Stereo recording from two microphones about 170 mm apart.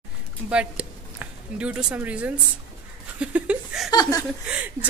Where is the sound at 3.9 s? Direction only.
25° left (ahead or behind).